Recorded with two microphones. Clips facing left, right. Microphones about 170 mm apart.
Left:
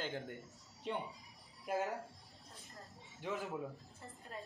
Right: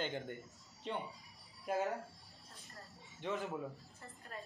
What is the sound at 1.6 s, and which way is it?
Speech, centre (ahead or behind).